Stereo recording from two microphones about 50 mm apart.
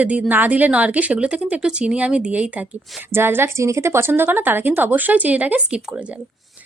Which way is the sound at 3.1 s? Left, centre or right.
Right.